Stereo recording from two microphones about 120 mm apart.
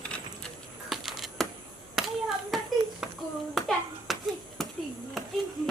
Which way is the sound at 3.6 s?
Centre (ahead or behind).